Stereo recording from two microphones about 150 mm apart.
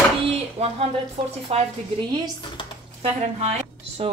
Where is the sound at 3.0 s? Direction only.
40° right (ahead or behind).